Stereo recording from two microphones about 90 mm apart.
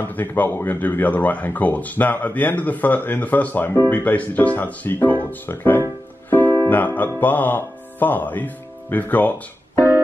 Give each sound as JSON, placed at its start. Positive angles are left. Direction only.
{"t": 0.0, "sound": "speech", "side_deg": 20}
{"t": 6.3, "sound": "music", "side_deg": 25}
{"t": 7.2, "sound": "speech", "side_deg": 20}